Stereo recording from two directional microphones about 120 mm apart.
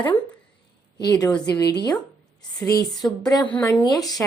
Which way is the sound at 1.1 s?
30° left (ahead or behind).